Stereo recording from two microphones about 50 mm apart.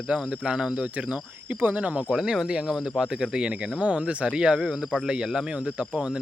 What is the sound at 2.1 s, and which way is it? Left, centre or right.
Speech, centre.